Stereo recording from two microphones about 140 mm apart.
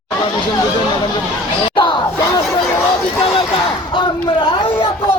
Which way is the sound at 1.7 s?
35° left (ahead or behind).